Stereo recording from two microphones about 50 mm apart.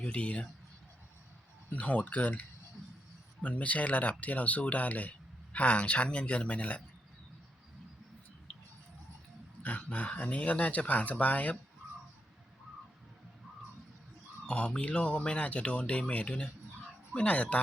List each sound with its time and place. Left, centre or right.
0.0 s speech: left
1.7 s speech: left
9.6 s speech: left
14.4 s speech: centre